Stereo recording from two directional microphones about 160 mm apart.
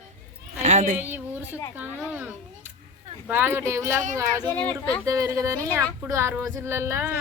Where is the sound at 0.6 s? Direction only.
50° right (ahead or behind).